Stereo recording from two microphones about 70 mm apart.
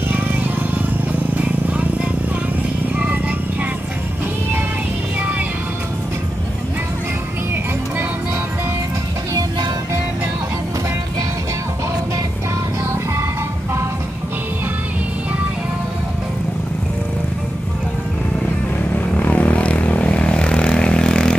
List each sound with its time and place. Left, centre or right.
0.1 s vehicle: right
18.9 s vehicle: left